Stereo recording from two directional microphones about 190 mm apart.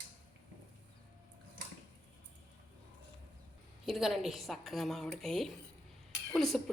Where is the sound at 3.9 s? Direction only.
Centre (ahead or behind).